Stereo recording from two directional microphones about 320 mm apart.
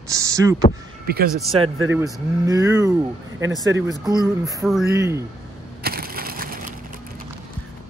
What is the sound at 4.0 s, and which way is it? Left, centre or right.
Speech, centre.